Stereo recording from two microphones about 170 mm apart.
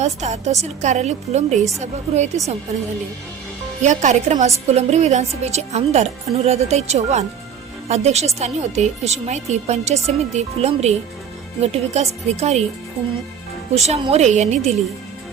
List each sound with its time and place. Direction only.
0.0 s a woman's voice: 40° right (ahead or behind)
3.8 s a woman's voice: 45° right (ahead or behind)
13.7 s a woman's voice: 40° right (ahead or behind)